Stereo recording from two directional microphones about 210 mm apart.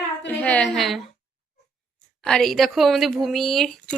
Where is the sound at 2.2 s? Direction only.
Centre (ahead or behind).